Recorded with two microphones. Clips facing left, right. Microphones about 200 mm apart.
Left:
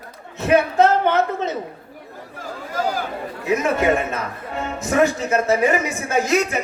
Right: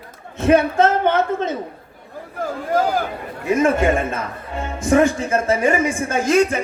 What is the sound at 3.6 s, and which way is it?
Speech, 50° right (ahead or behind).